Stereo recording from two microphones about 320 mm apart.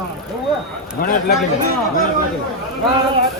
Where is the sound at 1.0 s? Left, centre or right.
Left.